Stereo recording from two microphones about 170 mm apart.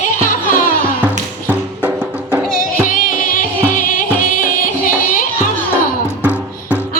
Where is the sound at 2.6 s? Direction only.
55° left (ahead or behind).